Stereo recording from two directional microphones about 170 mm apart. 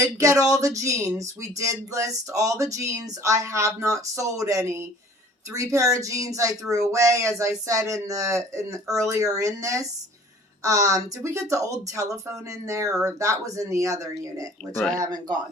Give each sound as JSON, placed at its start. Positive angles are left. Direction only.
{"t": 0.0, "sound": "speech", "side_deg": -20}